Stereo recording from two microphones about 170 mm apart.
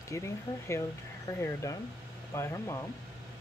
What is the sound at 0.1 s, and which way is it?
Speech, 15° left (ahead or behind).